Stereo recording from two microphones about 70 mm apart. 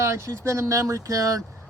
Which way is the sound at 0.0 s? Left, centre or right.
Right.